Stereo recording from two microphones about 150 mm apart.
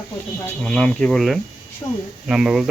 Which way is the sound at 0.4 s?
5° left (ahead or behind).